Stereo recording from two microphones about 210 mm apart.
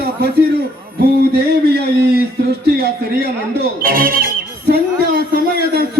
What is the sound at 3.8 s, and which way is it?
Music, 45° right (ahead or behind).